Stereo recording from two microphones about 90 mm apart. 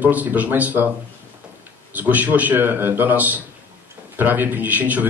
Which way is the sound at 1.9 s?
20° right (ahead or behind).